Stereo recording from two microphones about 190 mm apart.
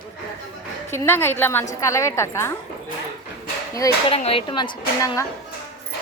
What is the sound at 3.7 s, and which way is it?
Speech, 20° left (ahead or behind).